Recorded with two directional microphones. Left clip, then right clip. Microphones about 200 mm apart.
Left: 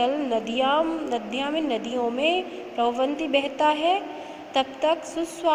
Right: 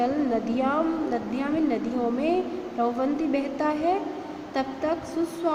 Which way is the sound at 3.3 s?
20° left (ahead or behind).